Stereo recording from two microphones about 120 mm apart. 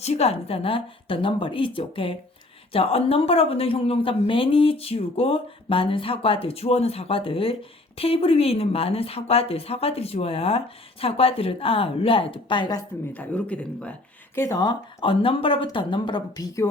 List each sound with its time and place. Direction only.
0.0 s a woman's voice: 60° left (ahead or behind); by 12.8 s 40° left (ahead or behind)
13.1 s speech: 10° left (ahead or behind)
14.3 s speech: 25° left (ahead or behind)
14.6 s a woman's voice: 45° left (ahead or behind)